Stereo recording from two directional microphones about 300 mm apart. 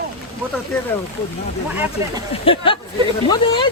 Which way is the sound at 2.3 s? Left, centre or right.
Centre.